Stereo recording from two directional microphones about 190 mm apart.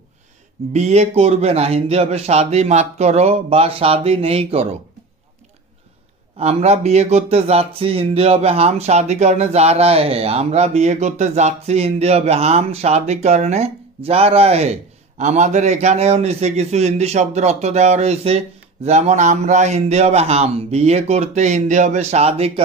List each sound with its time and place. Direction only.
0.7 s speech: 35° right (ahead or behind)
6.3 s speech: 35° right (ahead or behind)